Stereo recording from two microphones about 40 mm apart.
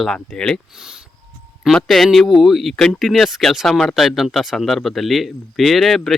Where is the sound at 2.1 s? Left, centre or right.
Centre.